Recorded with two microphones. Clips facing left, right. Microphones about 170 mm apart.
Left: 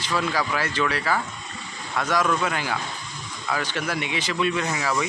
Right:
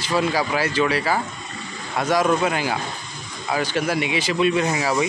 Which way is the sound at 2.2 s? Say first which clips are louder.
Right 4 dB; 25° right (ahead or behind).